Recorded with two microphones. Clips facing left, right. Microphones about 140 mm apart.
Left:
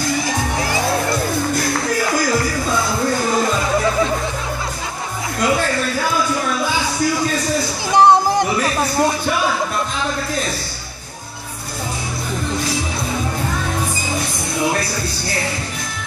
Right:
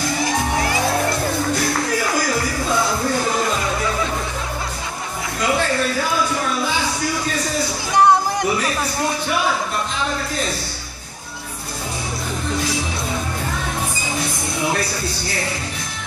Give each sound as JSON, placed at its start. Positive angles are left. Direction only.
{"t": 7.9, "sound": "music", "side_deg": 30}